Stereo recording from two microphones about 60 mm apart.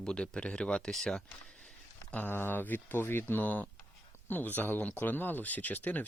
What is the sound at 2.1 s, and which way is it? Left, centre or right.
Speech, left.